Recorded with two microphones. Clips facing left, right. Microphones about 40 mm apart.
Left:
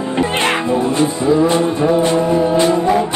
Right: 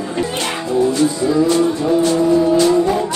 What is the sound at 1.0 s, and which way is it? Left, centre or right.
Music, left.